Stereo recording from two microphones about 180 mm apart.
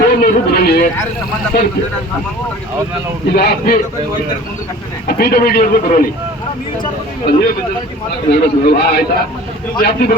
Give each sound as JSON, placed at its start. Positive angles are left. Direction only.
{"t": 0.1, "sound": "speech", "side_deg": 60}
{"t": 3.2, "sound": "speech", "side_deg": 60}
{"t": 5.0, "sound": "speech", "side_deg": 60}
{"t": 7.3, "sound": "speech", "side_deg": 60}